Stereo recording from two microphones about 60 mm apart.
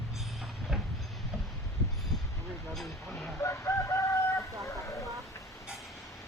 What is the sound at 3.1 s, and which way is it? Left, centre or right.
Chicken, centre.